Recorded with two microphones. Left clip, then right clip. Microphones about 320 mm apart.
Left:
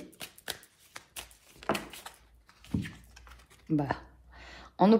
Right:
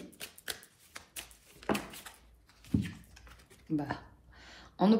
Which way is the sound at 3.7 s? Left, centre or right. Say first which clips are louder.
Left 4 dB; left.